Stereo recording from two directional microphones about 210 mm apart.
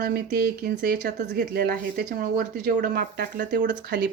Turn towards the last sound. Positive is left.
turn(degrees=-40)  # may be behind; listen again after turning